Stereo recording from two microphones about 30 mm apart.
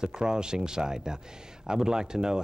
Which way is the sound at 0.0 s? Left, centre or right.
Right.